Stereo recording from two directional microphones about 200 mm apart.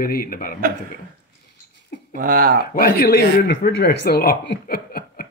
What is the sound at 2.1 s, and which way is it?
Speech, 45° right (ahead or behind).